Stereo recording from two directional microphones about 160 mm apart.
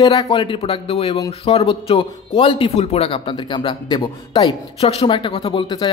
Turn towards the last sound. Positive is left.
turn(degrees=30)  # may be behind; listen again after turning